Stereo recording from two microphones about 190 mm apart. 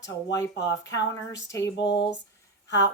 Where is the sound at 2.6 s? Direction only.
65° left (ahead or behind).